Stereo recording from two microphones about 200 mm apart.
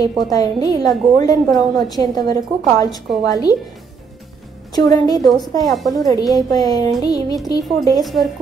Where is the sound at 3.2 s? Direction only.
20° left (ahead or behind).